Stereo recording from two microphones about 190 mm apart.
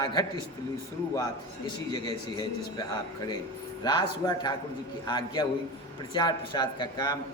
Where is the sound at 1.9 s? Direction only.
20° left (ahead or behind).